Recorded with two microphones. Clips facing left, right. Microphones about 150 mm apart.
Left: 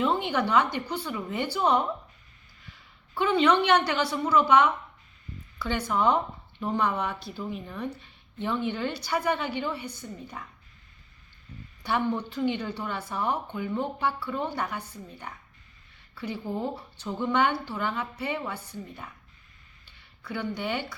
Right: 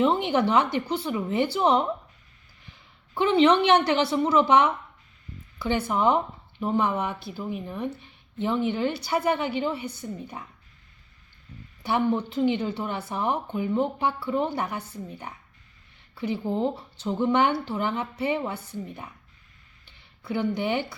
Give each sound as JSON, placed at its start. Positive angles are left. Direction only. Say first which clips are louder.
{"t": 0.0, "sound": "speech", "louder": "right 4 dB", "side_deg": -25}
{"t": 3.2, "sound": "speech", "louder": "right 3 dB", "side_deg": -25}
{"t": 5.6, "sound": "speech", "louder": "right 2 dB", "side_deg": -15}
{"t": 11.8, "sound": "speech", "louder": "right 3 dB", "side_deg": -10}
{"t": 12.1, "sound": "speech", "louder": "right 4 dB", "side_deg": -20}
{"t": 16.1, "sound": "speech", "louder": "right 5 dB", "side_deg": -20}